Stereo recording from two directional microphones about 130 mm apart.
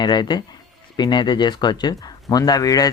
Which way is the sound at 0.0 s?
35° left (ahead or behind).